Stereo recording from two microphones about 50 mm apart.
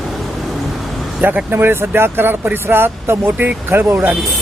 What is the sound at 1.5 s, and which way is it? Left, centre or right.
Speech, right.